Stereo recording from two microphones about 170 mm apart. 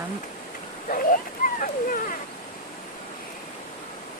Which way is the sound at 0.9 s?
55° left (ahead or behind).